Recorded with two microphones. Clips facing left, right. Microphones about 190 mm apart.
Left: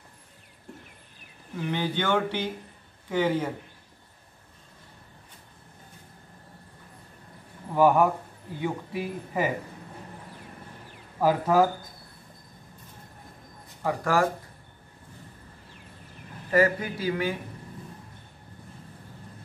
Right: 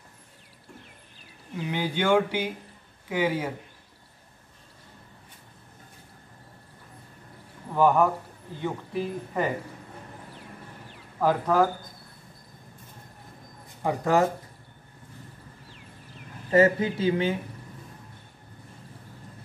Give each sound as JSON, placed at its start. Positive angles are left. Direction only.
{"t": 1.7, "sound": "speech", "side_deg": -10}
{"t": 7.7, "sound": "a man's voice", "side_deg": 5}
{"t": 11.1, "sound": "speech", "side_deg": 5}
{"t": 13.8, "sound": "speech", "side_deg": -20}
{"t": 16.4, "sound": "speech", "side_deg": -25}